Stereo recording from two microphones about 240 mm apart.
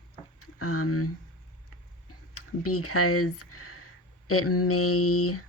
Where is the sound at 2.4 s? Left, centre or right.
Left.